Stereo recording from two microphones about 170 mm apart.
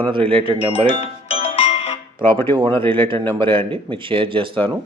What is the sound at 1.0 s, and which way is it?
Music, 35° left (ahead or behind).